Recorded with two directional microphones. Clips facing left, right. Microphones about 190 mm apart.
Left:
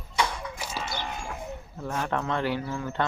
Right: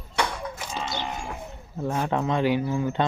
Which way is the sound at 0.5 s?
10° left (ahead or behind).